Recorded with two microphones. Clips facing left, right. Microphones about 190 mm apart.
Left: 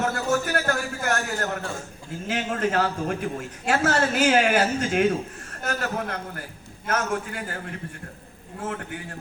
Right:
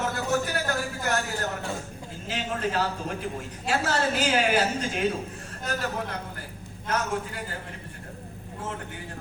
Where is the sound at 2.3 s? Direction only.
50° left (ahead or behind).